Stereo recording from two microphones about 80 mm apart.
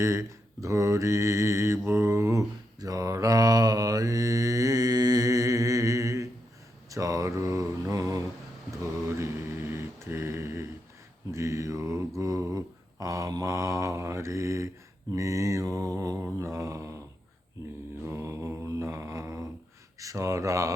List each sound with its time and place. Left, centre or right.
0.0 s mantra: right
2.8 s mantra: right
18.0 s mantra: right
20.0 s speech: right